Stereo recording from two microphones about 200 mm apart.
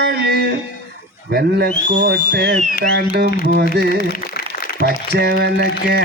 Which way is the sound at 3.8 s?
55° right (ahead or behind).